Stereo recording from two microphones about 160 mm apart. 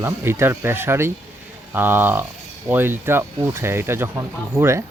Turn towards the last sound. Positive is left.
turn(degrees=-15)  # may be behind; listen again after turning